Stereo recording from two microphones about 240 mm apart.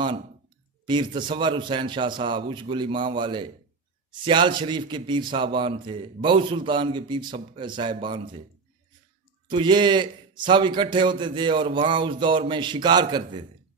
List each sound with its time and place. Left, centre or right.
0.8 s a man's voice: centre
9.5 s a man's voice: centre